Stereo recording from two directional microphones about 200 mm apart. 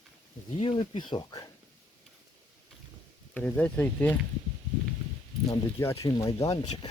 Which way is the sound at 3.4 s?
10° left (ahead or behind).